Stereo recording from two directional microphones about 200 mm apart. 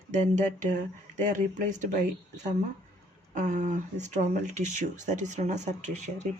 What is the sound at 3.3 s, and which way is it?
Speech, 40° right (ahead or behind).